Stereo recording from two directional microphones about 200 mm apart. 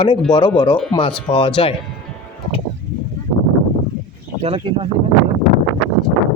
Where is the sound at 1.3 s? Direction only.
25° left (ahead or behind).